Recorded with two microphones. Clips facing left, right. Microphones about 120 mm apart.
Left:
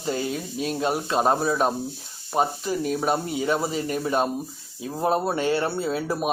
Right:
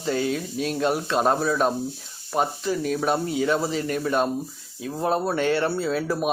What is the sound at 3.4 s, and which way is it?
Speech, 15° left (ahead or behind).